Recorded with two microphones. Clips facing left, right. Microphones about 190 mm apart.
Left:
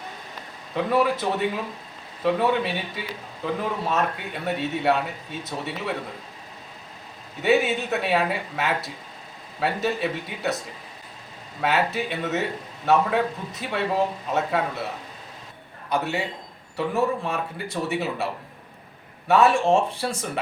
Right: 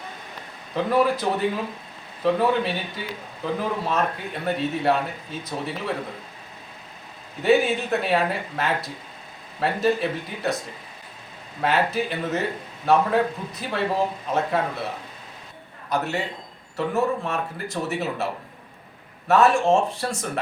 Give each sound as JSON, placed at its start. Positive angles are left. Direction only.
{"t": 0.8, "sound": "a man's voice", "side_deg": 0}
{"t": 7.4, "sound": "a man's voice", "side_deg": 0}
{"t": 11.6, "sound": "a man's voice", "side_deg": 0}
{"t": 15.9, "sound": "a man's voice", "side_deg": 0}
{"t": 19.3, "sound": "a man's voice", "side_deg": 0}